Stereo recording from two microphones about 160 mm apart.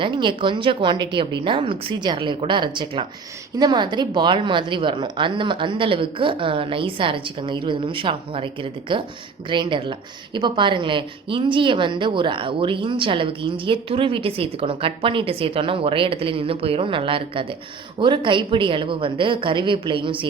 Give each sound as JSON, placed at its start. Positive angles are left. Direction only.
{"t": 0.0, "sound": "a woman's voice", "side_deg": -30}